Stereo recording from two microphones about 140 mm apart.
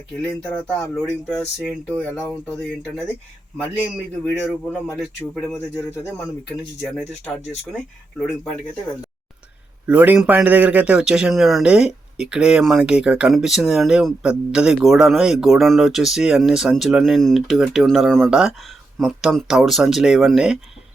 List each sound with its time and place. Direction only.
0.2 s speech: 5° left (ahead or behind)
2.4 s speech: 5° left (ahead or behind)
3.6 s a man's voice: 10° right (ahead or behind)
5.5 s speech: 20° left (ahead or behind)
9.8 s a man's voice: 10° right (ahead or behind)